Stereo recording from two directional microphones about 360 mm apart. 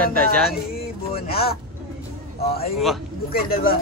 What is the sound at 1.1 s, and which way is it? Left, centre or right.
Vehicle, left.